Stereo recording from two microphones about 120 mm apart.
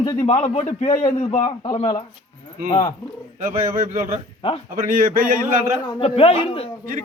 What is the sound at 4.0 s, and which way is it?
Speech, 65° right (ahead or behind).